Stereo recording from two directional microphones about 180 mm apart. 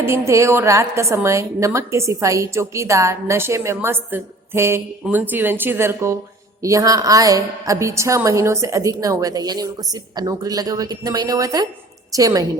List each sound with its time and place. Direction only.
0.0 s a woman's voice: 15° right (ahead or behind)